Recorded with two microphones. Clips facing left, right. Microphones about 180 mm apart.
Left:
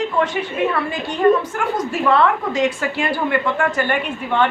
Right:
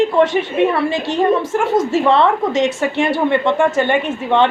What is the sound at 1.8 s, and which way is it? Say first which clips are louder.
A woman's voice: right 2 dB; 25° right (ahead or behind).